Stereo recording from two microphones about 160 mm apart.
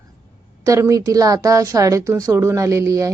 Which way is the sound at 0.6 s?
20° right (ahead or behind).